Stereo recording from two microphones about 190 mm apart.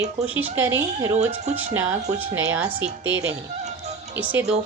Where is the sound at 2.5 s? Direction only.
10° right (ahead or behind).